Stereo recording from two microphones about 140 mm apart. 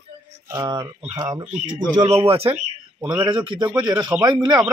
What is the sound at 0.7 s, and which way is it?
Speech, 30° right (ahead or behind).